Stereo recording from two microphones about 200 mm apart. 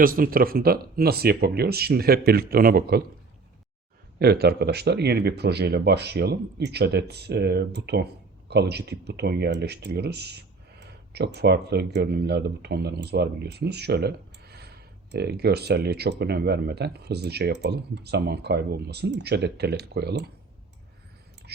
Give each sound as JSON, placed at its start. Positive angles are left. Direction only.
{"t": 0.0, "sound": "speech", "side_deg": -45}
{"t": 4.2, "sound": "speech", "side_deg": -50}